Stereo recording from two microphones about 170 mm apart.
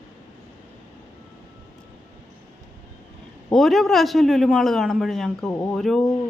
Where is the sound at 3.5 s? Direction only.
Centre (ahead or behind).